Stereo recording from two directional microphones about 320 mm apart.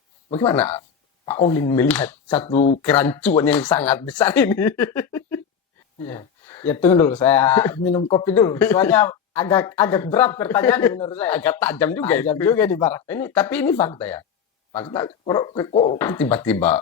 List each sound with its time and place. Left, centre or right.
0.3 s speech: centre
0.5 s speech: centre
2.6 s speech: left
2.8 s speech: centre